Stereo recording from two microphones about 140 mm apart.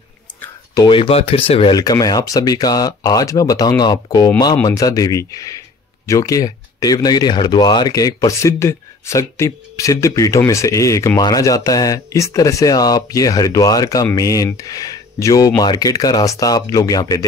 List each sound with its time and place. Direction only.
0.8 s speech: 40° left (ahead or behind)
1.8 s speech: 25° left (ahead or behind)